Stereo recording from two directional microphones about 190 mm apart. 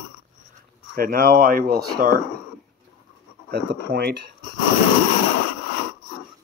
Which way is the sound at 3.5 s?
60° right (ahead or behind).